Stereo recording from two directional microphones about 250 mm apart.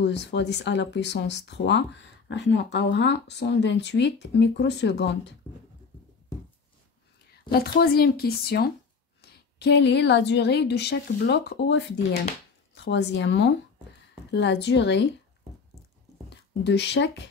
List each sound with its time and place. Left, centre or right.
0.0 s speech: left
7.5 s speech: left
16.3 s speech: left